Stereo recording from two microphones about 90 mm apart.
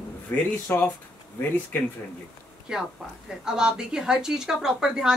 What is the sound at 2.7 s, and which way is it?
A woman's voice, 10° right (ahead or behind).